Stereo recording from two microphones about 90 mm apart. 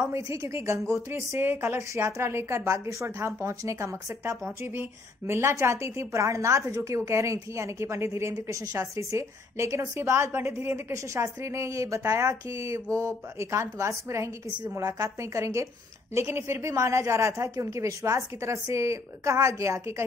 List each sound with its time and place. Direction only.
0.0 s a woman's voice: 35° right (ahead or behind)